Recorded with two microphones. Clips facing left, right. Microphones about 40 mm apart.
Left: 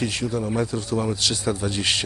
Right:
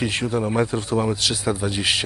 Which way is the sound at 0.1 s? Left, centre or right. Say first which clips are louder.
Right 3 dB; right.